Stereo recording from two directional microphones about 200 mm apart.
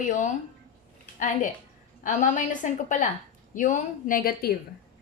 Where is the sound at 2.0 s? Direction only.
40° left (ahead or behind).